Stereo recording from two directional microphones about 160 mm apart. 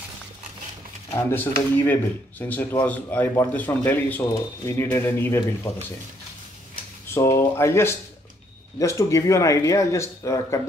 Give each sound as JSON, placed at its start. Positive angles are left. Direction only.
{"t": 1.1, "sound": "speech", "side_deg": 15}
{"t": 7.1, "sound": "speech", "side_deg": 20}